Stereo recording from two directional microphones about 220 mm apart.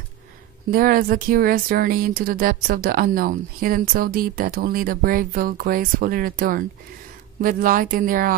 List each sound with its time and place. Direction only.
0.7 s speech: 40° right (ahead or behind)